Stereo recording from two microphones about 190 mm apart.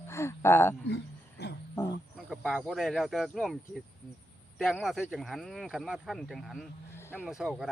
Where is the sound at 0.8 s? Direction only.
65° left (ahead or behind).